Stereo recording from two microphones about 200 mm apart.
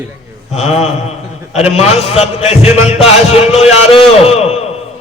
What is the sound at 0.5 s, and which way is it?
A man's voice, 30° left (ahead or behind).